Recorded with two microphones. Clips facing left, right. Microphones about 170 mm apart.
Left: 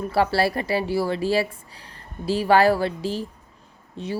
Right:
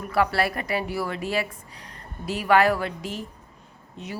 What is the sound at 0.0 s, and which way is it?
Speech, 30° left (ahead or behind).